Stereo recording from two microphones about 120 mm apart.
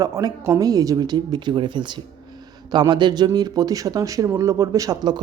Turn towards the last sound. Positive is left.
turn(degrees=-35)  # may be behind; listen again after turning